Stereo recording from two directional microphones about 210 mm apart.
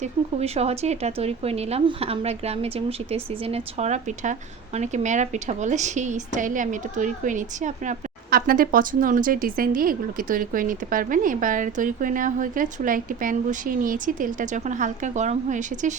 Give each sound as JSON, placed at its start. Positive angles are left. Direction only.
{"t": 0.0, "sound": "speech", "side_deg": -30}